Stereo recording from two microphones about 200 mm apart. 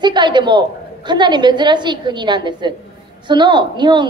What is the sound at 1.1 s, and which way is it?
A woman's voice, 20° right (ahead or behind).